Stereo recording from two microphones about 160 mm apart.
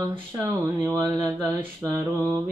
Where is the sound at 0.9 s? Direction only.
20° right (ahead or behind).